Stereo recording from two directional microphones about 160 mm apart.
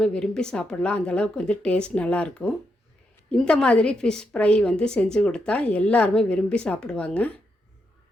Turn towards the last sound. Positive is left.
turn(degrees=10)  # may be behind; listen again after turning